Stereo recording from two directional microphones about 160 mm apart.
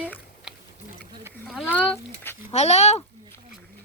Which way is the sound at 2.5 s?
45° left (ahead or behind).